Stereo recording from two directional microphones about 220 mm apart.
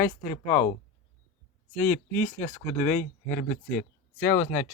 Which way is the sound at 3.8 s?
5° left (ahead or behind).